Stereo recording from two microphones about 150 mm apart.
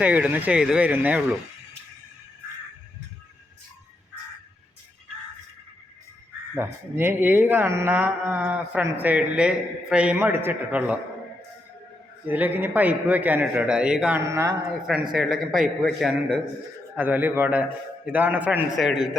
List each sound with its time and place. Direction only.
0.0 s speech: 10° right (ahead or behind)
6.6 s speech: 15° right (ahead or behind)
12.3 s speech: 10° right (ahead or behind)
14.2 s speech: 20° right (ahead or behind)
15.1 s a man's voice: centre (ahead or behind)